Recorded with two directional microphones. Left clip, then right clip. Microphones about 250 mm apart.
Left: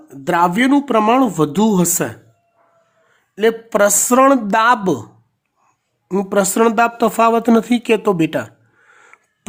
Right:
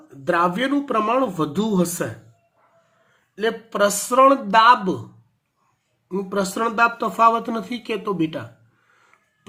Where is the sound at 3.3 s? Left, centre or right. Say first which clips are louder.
Left 7 dB; left.